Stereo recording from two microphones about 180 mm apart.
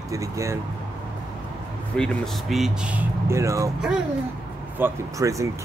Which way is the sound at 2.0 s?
5° left (ahead or behind).